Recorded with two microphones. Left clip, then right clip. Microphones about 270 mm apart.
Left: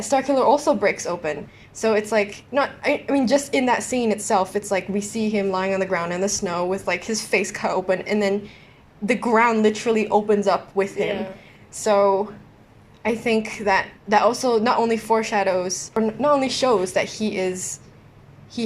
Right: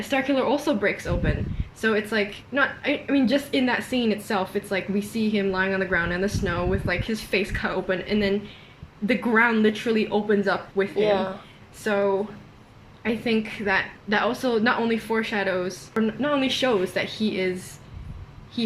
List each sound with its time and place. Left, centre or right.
0.0 s a woman's voice: centre